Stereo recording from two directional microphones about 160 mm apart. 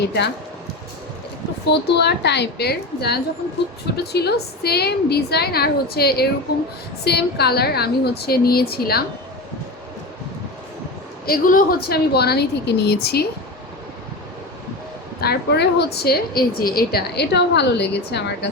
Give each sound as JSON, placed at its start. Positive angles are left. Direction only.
{"t": 1.6, "sound": "a woman's voice", "side_deg": 90}
{"t": 7.0, "sound": "a woman's voice", "side_deg": 90}
{"t": 11.3, "sound": "a woman's voice", "side_deg": 65}
{"t": 15.2, "sound": "a woman's voice", "side_deg": 85}